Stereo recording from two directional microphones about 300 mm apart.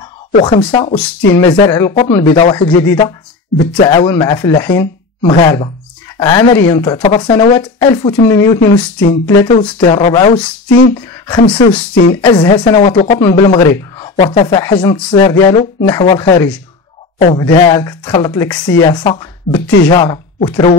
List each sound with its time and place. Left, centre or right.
0.3 s speech: centre
9.1 s speech: centre